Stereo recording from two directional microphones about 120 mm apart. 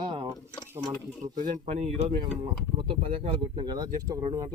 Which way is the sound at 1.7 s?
60° right (ahead or behind).